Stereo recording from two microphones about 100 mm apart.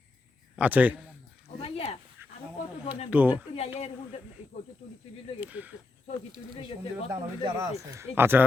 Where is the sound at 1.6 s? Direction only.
75° left (ahead or behind).